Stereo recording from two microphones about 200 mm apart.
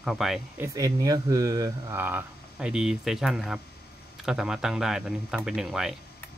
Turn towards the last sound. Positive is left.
turn(degrees=0)  # may be behind; listen again after turning